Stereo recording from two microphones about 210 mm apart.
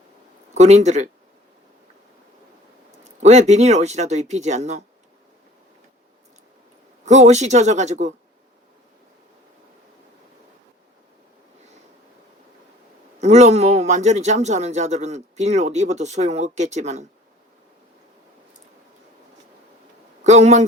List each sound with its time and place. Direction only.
0.5 s a man's voice: 30° right (ahead or behind)
3.0 s a man's voice: 35° right (ahead or behind)
7.0 s a man's voice: 35° right (ahead or behind)
13.1 s a man's voice: 35° right (ahead or behind)
20.2 s a man's voice: 35° right (ahead or behind)